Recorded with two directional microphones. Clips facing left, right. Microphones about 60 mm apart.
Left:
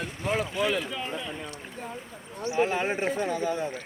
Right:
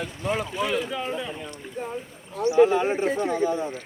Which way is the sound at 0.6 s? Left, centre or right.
Centre.